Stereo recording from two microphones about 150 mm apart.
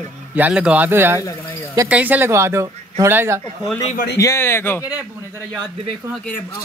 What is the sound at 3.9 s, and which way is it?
Speech, 90° left.